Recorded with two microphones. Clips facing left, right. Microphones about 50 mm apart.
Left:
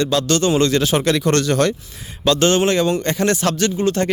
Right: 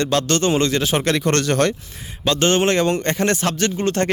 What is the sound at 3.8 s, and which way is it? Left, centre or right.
Speech, right.